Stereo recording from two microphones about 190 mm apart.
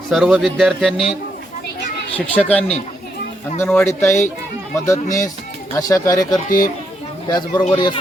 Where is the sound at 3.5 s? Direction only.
10° left (ahead or behind).